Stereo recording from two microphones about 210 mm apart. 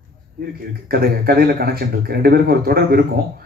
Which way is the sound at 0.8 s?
45° right (ahead or behind).